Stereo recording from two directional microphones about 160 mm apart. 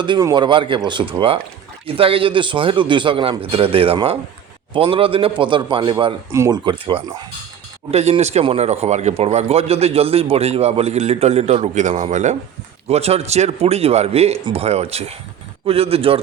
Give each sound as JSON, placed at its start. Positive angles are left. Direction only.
{"t": 0.0, "sound": "speech", "side_deg": -30}
{"t": 6.3, "sound": "speech", "side_deg": -15}
{"t": 6.7, "sound": "speech", "side_deg": -30}